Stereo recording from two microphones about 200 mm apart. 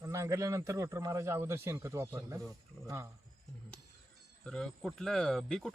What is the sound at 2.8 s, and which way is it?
Speech, centre (ahead or behind).